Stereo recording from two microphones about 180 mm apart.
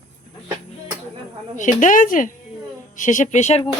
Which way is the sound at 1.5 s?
45° left (ahead or behind).